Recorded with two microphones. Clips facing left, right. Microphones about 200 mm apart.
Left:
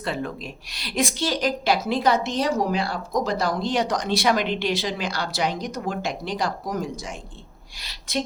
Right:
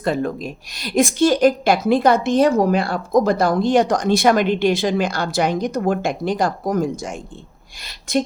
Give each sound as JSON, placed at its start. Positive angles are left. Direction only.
{"t": 0.0, "sound": "a woman's voice", "side_deg": -45}